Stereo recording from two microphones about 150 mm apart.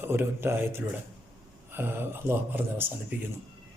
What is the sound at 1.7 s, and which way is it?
A man's voice, 15° right (ahead or behind).